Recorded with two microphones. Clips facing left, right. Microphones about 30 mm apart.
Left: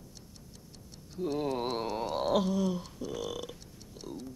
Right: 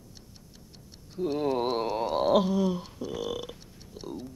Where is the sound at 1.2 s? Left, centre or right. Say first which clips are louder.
Right 5 dB; centre.